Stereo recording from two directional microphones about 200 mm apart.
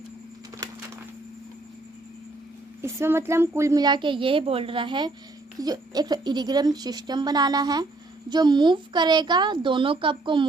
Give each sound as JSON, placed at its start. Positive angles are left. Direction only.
{"t": 2.8, "sound": "a woman's voice", "side_deg": -15}